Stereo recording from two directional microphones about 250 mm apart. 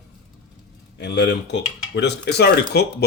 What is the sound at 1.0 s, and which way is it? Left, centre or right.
Speech, left.